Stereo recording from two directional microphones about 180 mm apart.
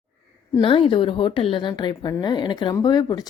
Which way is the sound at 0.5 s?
30° left (ahead or behind).